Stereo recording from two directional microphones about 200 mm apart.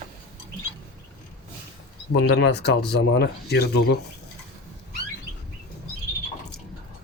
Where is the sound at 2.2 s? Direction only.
55° left (ahead or behind).